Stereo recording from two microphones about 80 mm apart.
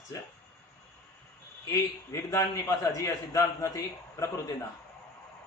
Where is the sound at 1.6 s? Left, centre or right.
Left.